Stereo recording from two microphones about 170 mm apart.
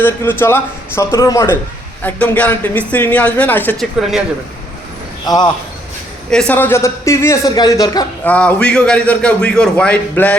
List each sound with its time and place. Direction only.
0.0 s a man's voice: 15° left (ahead or behind)
2.0 s a man's voice: 10° left (ahead or behind)
5.2 s speech: 25° left (ahead or behind)
6.3 s a man's voice: 5° left (ahead or behind)
8.2 s a man's voice: 10° left (ahead or behind)